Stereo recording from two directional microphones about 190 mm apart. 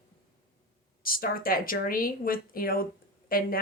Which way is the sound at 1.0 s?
50° left (ahead or behind).